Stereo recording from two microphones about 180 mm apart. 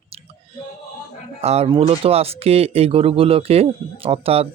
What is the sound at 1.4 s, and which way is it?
Speech, 35° right (ahead or behind).